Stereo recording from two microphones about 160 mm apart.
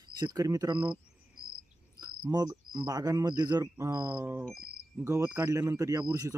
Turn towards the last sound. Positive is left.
turn(degrees=-20)  # may be behind; listen again after turning